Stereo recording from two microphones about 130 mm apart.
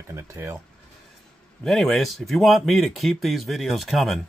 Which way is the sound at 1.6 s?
Centre (ahead or behind).